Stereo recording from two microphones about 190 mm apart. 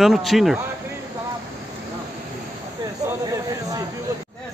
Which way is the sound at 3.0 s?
20° right (ahead or behind).